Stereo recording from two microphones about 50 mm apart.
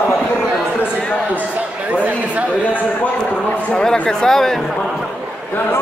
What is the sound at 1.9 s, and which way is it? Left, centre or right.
Chatter, right.